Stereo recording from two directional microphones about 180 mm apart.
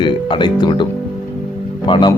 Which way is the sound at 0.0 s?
25° left (ahead or behind).